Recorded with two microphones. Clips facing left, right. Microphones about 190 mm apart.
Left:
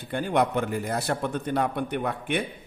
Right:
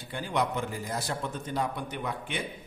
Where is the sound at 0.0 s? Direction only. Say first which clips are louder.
Left 6 dB; 55° left (ahead or behind).